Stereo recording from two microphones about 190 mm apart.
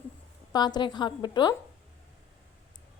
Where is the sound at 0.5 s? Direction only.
20° left (ahead or behind).